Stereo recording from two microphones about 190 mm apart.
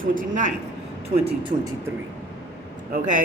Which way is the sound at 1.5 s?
40° right (ahead or behind).